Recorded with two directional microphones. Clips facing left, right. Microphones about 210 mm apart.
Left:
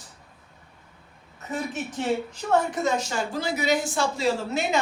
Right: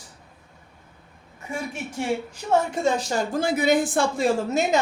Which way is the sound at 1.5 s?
10° right (ahead or behind).